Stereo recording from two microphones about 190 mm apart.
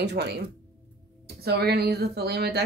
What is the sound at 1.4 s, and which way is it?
Speech, 55° right (ahead or behind).